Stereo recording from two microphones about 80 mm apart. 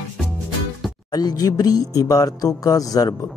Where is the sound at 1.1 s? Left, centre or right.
Left.